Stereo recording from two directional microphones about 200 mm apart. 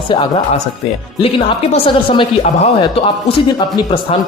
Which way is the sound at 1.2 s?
30° left (ahead or behind).